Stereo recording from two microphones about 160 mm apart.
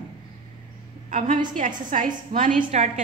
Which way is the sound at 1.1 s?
55° right (ahead or behind).